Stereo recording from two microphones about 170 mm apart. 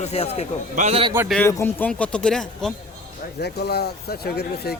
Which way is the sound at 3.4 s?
70° left (ahead or behind).